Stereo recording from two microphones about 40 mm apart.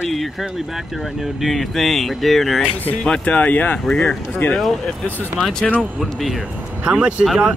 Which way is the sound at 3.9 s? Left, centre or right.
Centre.